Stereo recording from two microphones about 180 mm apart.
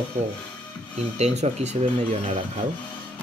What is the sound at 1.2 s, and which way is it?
Speech, 40° right (ahead or behind).